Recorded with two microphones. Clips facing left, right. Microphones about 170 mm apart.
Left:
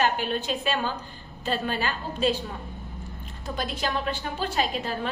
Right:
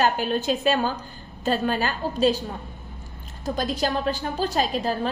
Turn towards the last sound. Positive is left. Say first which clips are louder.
# right 4 dB
turn(degrees=-35)  # may be behind; listen again after turning